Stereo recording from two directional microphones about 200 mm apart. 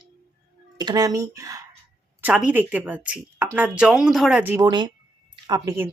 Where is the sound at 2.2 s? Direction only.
5° right (ahead or behind).